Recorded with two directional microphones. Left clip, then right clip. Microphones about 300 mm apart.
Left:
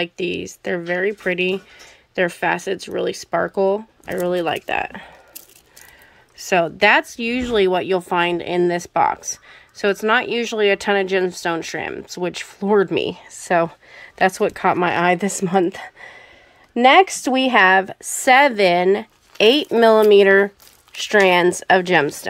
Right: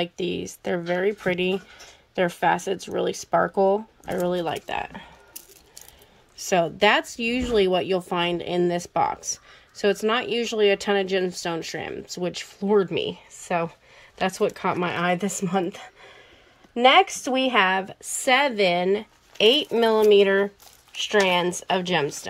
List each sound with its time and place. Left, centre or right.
0.0 s speech: centre
16.8 s speech: left
17.2 s speech: centre